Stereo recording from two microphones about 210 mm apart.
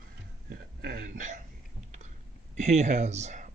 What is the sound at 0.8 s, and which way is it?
Speech, 45° right (ahead or behind).